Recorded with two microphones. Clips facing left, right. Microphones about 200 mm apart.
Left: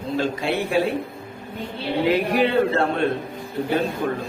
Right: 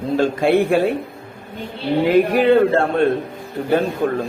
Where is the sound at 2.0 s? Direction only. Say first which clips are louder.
Right 6 dB; 50° right (ahead or behind).